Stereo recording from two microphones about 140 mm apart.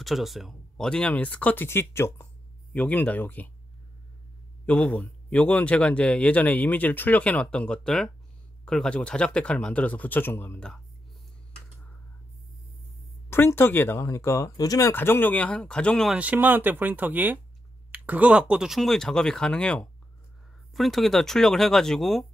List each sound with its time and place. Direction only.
0.0 s speech: centre (ahead or behind)
4.6 s speech: 10° left (ahead or behind)
13.3 s speech: 15° left (ahead or behind)
16.2 s speech: 10° right (ahead or behind)